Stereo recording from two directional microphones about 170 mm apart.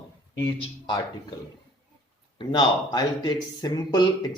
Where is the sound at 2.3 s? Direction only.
25° left (ahead or behind).